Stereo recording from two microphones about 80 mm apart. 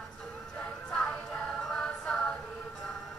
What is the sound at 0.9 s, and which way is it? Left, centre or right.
Music, centre.